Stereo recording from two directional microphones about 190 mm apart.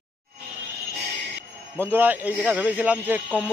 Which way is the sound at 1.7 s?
10° right (ahead or behind).